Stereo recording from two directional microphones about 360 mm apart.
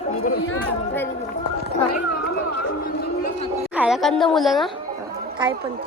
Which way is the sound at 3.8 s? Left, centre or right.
Centre.